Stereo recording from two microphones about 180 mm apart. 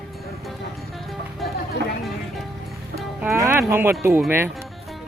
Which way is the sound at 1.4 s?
60° left (ahead or behind).